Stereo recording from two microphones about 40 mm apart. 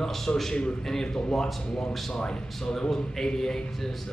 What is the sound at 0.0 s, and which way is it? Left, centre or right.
Speech, centre.